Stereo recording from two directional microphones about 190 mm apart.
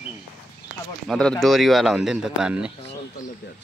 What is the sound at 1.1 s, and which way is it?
A man's voice, 5° left (ahead or behind).